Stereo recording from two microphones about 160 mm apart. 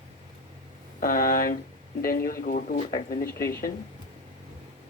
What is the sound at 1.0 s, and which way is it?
Speech, 60° left (ahead or behind).